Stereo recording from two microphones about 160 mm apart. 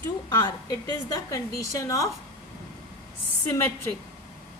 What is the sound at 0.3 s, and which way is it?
A woman's voice, 25° left (ahead or behind).